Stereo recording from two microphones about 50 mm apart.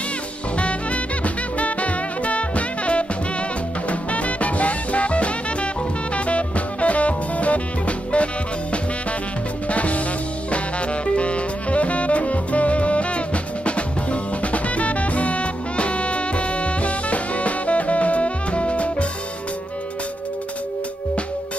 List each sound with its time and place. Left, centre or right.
0.6 s music: left
9.7 s music: left
10.5 s saxophone: left